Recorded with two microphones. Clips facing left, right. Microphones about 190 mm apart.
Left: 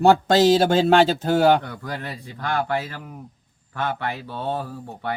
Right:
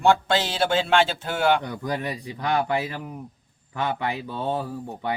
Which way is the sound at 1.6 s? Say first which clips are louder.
Right 4 dB; 15° right (ahead or behind).